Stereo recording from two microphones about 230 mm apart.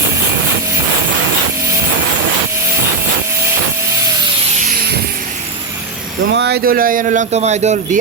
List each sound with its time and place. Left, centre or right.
6.3 s speech: right